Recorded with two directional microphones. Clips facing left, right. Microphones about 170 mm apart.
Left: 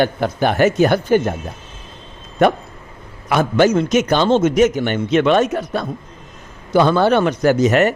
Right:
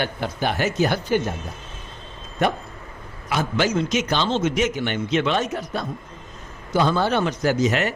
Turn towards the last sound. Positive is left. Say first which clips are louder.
# left 7 dB
turn(degrees=50)  # may be behind; listen again after turning